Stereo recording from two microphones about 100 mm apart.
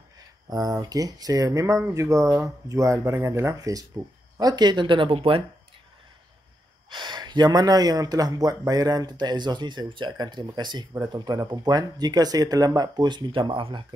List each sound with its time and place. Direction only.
0.5 s speech: 40° right (ahead or behind); by 5.4 s 65° right (ahead or behind)
6.9 s speech: 50° right (ahead or behind)